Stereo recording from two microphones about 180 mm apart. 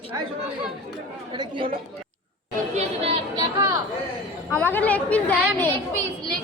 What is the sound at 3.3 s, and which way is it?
Speech, 20° right (ahead or behind).